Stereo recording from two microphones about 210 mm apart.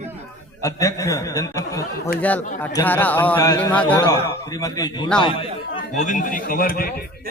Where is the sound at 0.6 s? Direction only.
15° left (ahead or behind).